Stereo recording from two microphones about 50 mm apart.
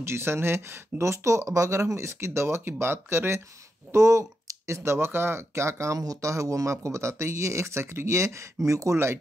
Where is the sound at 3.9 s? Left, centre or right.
Right.